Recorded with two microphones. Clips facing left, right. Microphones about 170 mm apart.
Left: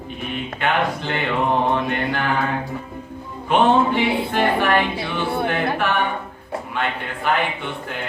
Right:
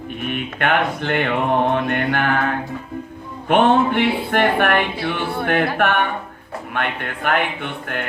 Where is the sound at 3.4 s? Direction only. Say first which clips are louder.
Right 1 dB; 55° right (ahead or behind).